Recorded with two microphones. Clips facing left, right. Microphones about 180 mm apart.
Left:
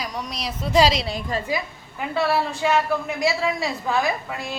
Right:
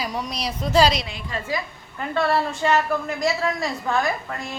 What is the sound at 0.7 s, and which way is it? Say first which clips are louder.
Speech: even; 25° left (ahead or behind).